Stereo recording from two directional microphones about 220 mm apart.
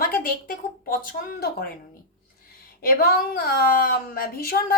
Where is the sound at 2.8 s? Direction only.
45° left (ahead or behind).